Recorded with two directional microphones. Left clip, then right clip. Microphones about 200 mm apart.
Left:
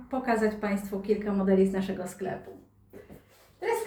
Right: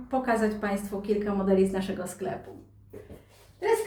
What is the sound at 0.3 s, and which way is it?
Speech, 10° right (ahead or behind).